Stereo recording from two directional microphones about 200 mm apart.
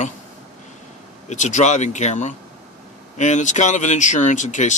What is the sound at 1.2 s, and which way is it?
Speech, 40° left (ahead or behind).